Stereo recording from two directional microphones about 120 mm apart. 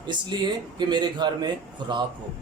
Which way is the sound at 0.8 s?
40° right (ahead or behind).